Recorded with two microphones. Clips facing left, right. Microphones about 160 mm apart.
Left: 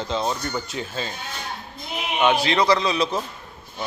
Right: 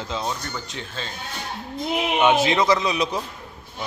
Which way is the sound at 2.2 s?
20° right (ahead or behind).